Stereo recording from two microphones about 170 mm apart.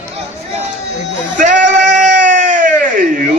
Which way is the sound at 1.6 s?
45° right (ahead or behind).